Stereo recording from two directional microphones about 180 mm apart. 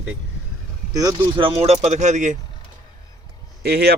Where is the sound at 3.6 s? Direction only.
60° right (ahead or behind).